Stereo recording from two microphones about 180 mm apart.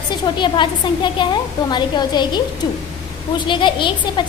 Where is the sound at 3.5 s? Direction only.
25° left (ahead or behind).